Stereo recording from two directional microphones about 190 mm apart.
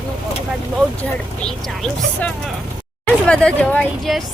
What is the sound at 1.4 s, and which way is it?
Speech, 5° left (ahead or behind).